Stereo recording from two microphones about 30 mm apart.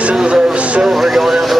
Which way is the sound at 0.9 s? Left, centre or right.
Centre.